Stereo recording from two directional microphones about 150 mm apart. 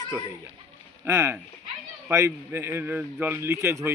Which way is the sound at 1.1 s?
20° right (ahead or behind).